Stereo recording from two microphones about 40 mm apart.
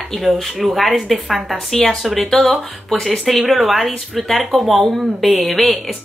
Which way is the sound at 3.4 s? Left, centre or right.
Centre.